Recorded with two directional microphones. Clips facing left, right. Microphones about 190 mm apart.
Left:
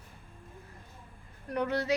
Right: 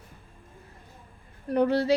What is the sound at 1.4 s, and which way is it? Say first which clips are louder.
Speech: right 7 dB; 30° right (ahead or behind).